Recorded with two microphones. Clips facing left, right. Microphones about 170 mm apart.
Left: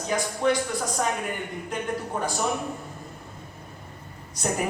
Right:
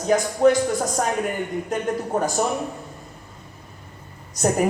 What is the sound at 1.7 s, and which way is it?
Speech, 45° right (ahead or behind).